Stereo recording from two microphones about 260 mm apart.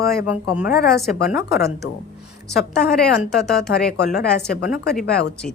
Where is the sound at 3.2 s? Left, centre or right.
Centre.